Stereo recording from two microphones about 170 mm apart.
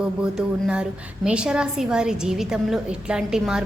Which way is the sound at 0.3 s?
5° right (ahead or behind).